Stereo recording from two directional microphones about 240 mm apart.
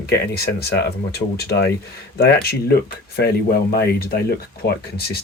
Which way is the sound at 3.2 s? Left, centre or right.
Left.